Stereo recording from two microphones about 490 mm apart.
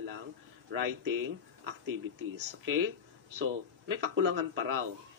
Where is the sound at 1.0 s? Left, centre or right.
Right.